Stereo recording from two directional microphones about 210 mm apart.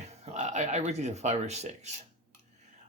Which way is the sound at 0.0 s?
35° right (ahead or behind).